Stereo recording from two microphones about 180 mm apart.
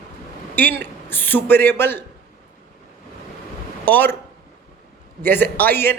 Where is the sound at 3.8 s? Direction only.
10° left (ahead or behind).